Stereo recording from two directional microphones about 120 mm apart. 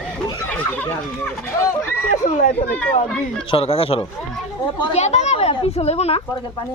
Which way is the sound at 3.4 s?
55° left (ahead or behind).